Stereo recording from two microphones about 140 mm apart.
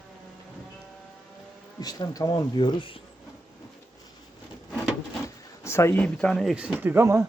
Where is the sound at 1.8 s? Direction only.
30° left (ahead or behind).